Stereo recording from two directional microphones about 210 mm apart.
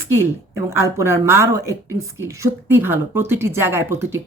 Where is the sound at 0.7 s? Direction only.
10° right (ahead or behind).